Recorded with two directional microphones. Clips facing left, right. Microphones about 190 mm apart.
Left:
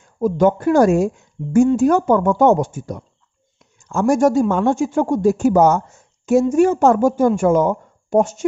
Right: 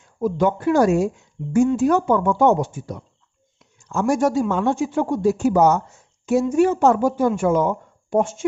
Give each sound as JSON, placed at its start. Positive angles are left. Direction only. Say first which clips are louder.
{"t": 0.0, "sound": "a man's voice", "louder": "left 4 dB", "side_deg": 45}